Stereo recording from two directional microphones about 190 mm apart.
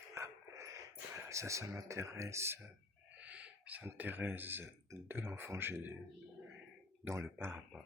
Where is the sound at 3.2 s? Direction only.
5° right (ahead or behind).